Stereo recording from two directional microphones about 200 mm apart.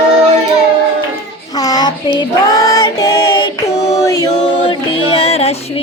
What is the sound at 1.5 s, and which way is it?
Child singing, 20° left (ahead or behind).